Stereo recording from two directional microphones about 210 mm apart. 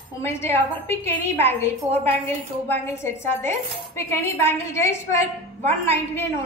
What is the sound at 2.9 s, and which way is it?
Speech, 10° left (ahead or behind).